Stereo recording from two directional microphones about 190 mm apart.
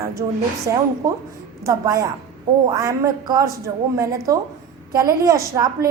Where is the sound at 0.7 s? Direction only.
15° right (ahead or behind).